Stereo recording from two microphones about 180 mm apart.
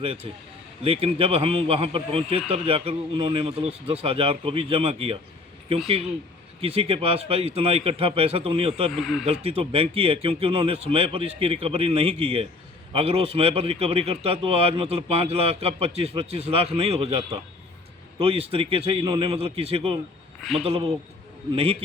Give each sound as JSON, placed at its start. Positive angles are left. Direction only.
{"t": 0.0, "sound": "a man's voice", "side_deg": -30}
{"t": 6.6, "sound": "a man's voice", "side_deg": -35}
{"t": 8.9, "sound": "speech", "side_deg": 0}
{"t": 9.2, "sound": "a man's voice", "side_deg": -35}
{"t": 20.4, "sound": "speech", "side_deg": 0}
{"t": 20.7, "sound": "a man's voice", "side_deg": -30}